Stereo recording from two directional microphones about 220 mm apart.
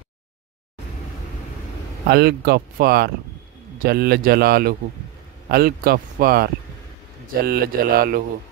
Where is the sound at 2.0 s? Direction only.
45° right (ahead or behind).